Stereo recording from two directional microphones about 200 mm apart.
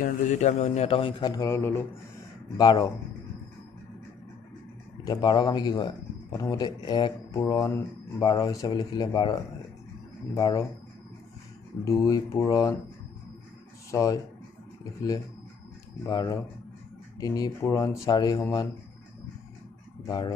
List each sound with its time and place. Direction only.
0.0 s a man's voice: 35° left (ahead or behind); by 2.9 s 20° left (ahead or behind)
5.0 s a man's voice: 20° left (ahead or behind)
11.8 s speech: 15° left (ahead or behind)
13.8 s speech: 15° left (ahead or behind)
16.1 s a man's voice: 20° left (ahead or behind)
20.1 s a man's voice: 20° left (ahead or behind)